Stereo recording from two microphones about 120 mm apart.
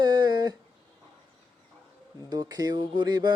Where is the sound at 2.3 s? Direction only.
35° right (ahead or behind).